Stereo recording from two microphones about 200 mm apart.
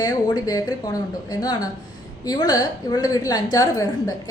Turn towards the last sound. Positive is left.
turn(degrees=20)  # may be behind; listen again after turning